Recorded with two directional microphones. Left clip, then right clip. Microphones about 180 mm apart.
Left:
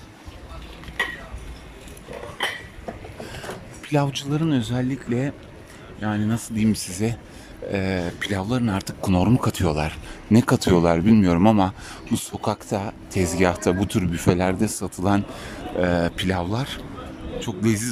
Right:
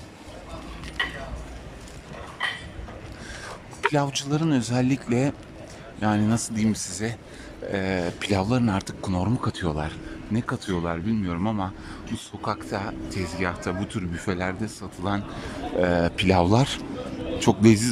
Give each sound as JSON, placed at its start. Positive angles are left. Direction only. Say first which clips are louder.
{"t": 2.4, "sound": "a sound", "louder": "left 2 dB", "side_deg": 55}
{"t": 3.9, "sound": "speech", "louder": "left 7 dB", "side_deg": 0}
{"t": 10.3, "sound": "speech", "louder": "left 10 dB", "side_deg": 25}
{"t": 15.4, "sound": "a man's voice", "louder": "even", "side_deg": 0}